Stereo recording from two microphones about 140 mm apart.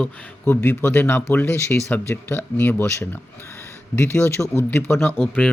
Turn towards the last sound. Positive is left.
turn(degrees=10)  # may be behind; listen again after turning